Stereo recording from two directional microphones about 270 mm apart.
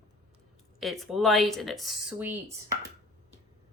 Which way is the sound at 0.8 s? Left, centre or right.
Centre.